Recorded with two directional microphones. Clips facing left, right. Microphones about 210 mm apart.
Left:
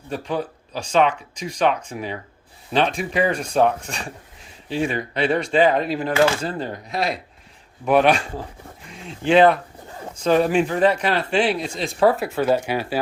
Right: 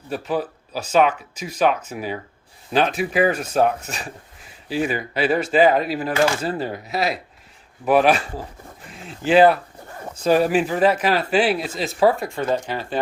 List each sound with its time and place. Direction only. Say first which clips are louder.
0.1 s speech: right 1 dB; 5° right (ahead or behind); by 13.0 s 10° left (ahead or behind)